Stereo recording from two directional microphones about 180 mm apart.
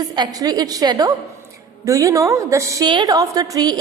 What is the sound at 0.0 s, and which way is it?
A woman's voice, 20° right (ahead or behind).